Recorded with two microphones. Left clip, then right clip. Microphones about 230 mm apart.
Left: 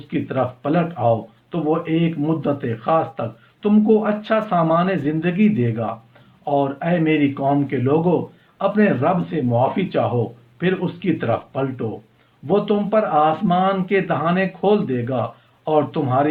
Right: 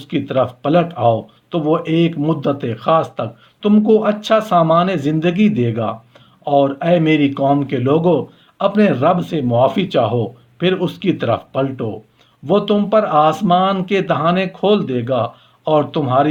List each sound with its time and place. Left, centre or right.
0.1 s speech: right